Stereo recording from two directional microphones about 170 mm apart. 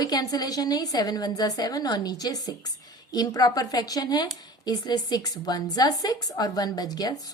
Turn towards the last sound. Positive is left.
turn(degrees=20)  # may be behind; listen again after turning